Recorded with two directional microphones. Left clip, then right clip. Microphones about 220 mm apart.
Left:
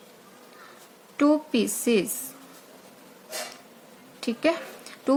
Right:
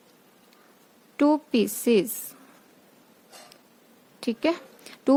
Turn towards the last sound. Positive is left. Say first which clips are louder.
# right 2 dB
turn(degrees=-45)  # may be behind; listen again after turning